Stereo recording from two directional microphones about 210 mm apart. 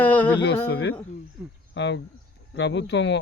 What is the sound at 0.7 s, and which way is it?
Speech, 55° left (ahead or behind).